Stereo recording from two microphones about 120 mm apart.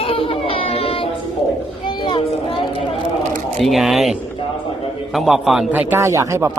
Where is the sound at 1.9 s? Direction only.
40° left (ahead or behind).